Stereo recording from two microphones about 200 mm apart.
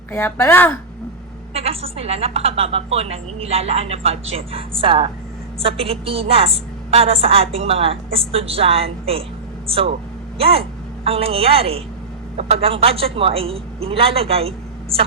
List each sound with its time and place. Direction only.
0.1 s a woman's voice: 10° left (ahead or behind)
1.5 s a woman's voice: 30° right (ahead or behind)